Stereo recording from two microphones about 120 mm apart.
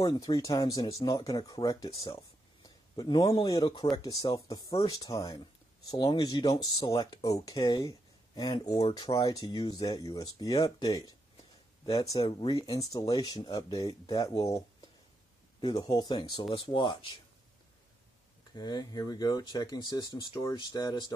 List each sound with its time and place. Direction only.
0.0 s speech: 30° left (ahead or behind)
2.6 s a sound: 30° left (ahead or behind)
3.4 s speech: 30° left (ahead or behind)
5.1 s speech: 45° left (ahead or behind)
5.9 s speech: 35° left (ahead or behind)
8.9 s speech: 30° left (ahead or behind)
12.2 s speech: 40° left (ahead or behind)
15.6 s speech: 30° left (ahead or behind)
18.5 s speech: 35° left (ahead or behind)